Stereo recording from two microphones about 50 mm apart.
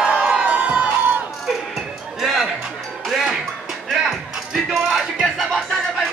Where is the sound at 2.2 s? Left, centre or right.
Centre.